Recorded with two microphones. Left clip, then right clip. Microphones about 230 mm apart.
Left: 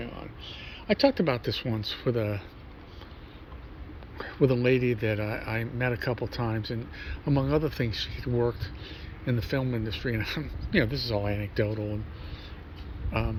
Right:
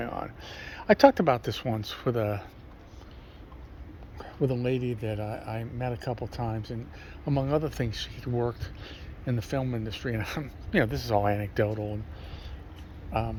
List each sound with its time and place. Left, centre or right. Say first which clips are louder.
0.0 s a sound: right 6 dB; centre
0.8 s speech: right 5 dB; centre
4.2 s speech: left 5 dB; centre
13.1 s speech: right 1 dB; centre